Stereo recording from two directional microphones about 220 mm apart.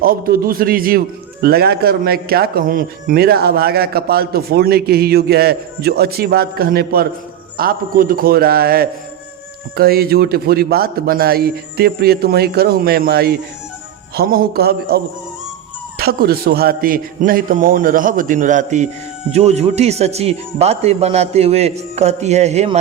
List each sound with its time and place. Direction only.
0.0 s a man's voice: 40° right (ahead or behind)